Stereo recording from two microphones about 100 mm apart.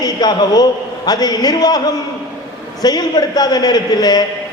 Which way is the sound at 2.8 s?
45° left (ahead or behind).